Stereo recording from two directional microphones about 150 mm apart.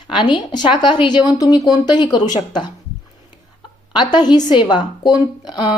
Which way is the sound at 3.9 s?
30° left (ahead or behind).